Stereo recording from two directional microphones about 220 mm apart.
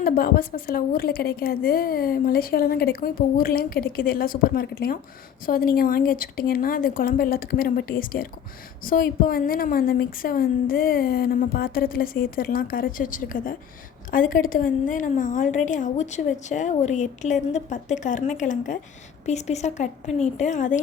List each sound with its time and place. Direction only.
0.0 s a woman's voice: 45° left (ahead or behind)